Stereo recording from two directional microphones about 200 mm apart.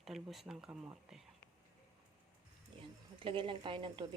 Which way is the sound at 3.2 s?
25° right (ahead or behind).